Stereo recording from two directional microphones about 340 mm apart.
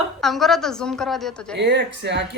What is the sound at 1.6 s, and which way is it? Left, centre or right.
Speech, right.